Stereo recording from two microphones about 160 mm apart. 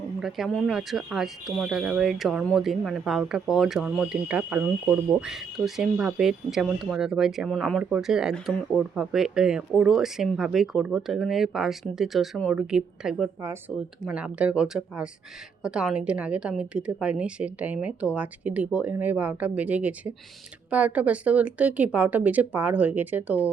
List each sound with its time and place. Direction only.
0.2 s speech: centre (ahead or behind)
13.4 s a woman's voice: 15° right (ahead or behind)